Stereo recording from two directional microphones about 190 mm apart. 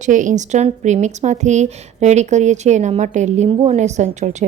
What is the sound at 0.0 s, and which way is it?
Speech, 40° right (ahead or behind).